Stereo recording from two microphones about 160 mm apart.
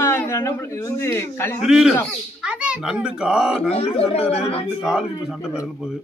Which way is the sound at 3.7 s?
40° left (ahead or behind).